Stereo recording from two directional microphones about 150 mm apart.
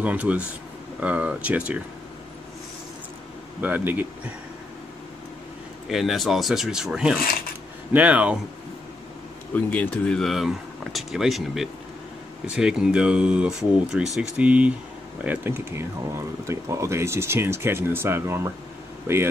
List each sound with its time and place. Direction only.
0.0 s speech: 10° right (ahead or behind)
3.6 s speech: 10° right (ahead or behind)
5.9 s speech: centre (ahead or behind)
9.5 s speech: 10° left (ahead or behind); by 18.5 s 20° right (ahead or behind)